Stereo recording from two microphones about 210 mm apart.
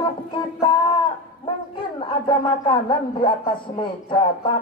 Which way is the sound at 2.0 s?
25° left (ahead or behind).